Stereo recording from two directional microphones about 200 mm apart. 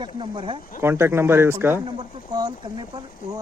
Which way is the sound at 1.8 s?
20° right (ahead or behind).